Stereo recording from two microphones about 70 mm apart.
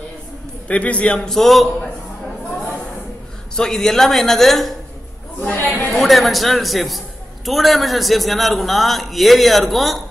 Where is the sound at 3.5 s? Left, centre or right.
Centre.